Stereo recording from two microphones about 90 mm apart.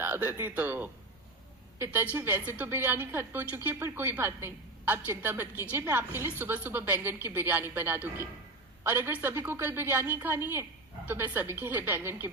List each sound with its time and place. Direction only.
0.0 s a woman's voice: 25° right (ahead or behind)